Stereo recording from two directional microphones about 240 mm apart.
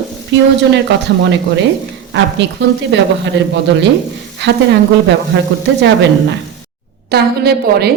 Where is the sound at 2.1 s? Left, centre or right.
Right.